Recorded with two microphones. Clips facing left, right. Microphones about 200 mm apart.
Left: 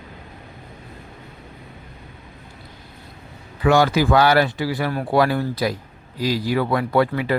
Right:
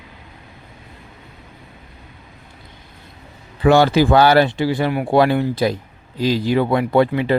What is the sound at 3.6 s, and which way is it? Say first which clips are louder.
Speech: right 4 dB; 30° right (ahead or behind).